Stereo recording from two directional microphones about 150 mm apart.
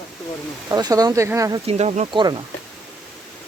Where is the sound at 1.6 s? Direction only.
45° right (ahead or behind).